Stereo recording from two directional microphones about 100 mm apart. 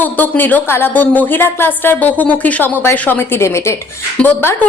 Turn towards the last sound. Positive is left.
turn(degrees=15)  # may be behind; listen again after turning